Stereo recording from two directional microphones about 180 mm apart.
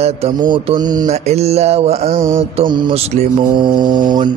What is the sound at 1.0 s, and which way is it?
Mantra, 35° right (ahead or behind).